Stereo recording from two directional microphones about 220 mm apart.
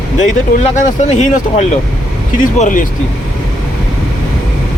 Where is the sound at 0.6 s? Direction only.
35° left (ahead or behind).